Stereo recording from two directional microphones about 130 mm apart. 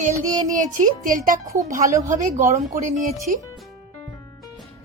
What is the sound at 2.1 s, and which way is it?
Speech, 70° right (ahead or behind).